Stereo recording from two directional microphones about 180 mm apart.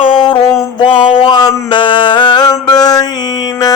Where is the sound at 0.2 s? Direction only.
25° left (ahead or behind).